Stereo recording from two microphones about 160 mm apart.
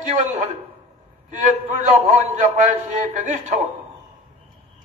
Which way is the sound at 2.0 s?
50° right (ahead or behind).